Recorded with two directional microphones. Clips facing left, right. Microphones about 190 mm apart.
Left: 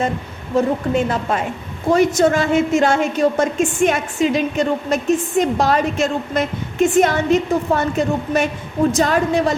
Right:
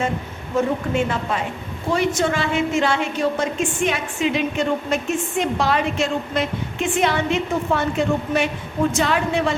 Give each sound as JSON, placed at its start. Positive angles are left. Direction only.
{"t": 0.5, "sound": "a woman's voice", "side_deg": 40}